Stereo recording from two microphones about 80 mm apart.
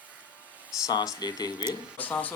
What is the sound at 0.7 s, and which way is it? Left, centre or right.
Speech, left.